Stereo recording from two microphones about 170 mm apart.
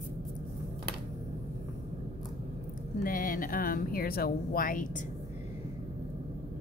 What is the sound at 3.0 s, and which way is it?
Speech, 55° left (ahead or behind).